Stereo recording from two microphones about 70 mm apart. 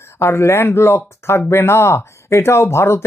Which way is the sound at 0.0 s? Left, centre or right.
Left.